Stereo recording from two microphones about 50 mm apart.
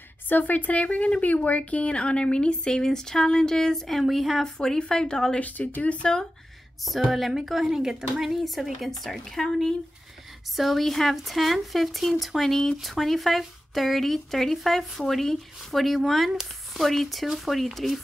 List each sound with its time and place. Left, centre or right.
0.3 s a woman's voice: left; by 4.5 s centre
4.6 s a woman's voice: centre
5.4 s speech: left
6.8 s speech: centre